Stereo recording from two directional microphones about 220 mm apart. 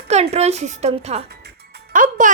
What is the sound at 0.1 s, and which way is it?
A woman's voice, 30° right (ahead or behind).